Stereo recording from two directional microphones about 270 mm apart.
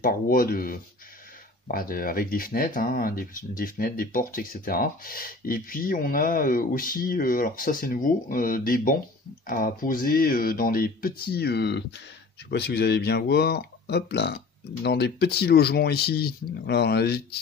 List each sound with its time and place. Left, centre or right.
0.0 s speech: left